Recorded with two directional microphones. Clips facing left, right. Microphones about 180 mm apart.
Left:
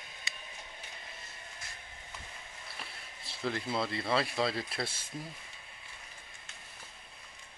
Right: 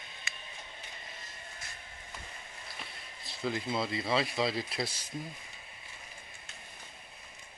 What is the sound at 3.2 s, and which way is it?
Speech, centre (ahead or behind).